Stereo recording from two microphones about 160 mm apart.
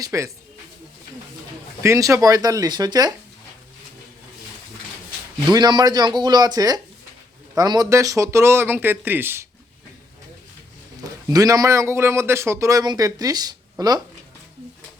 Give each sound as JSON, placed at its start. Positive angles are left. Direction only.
{"t": 0.0, "sound": "speech", "side_deg": -20}
{"t": 1.8, "sound": "a man's voice", "side_deg": -20}
{"t": 5.5, "sound": "a man's voice", "side_deg": -25}
{"t": 11.0, "sound": "a man's voice", "side_deg": -20}